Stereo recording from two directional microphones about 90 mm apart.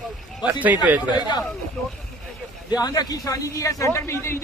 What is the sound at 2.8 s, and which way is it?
Speech, 45° left (ahead or behind).